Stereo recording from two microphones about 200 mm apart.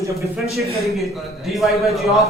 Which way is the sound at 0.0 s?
15° right (ahead or behind).